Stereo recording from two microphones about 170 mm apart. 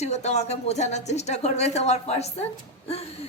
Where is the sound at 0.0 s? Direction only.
40° left (ahead or behind).